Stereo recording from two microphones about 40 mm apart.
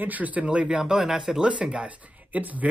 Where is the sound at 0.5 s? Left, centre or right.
Right.